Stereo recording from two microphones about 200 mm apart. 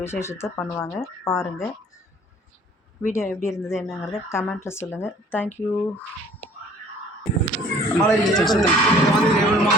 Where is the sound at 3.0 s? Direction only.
10° left (ahead or behind).